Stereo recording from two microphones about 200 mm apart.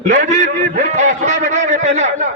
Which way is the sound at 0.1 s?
35° right (ahead or behind).